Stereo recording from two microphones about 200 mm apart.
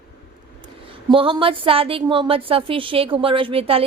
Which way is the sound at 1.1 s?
25° right (ahead or behind).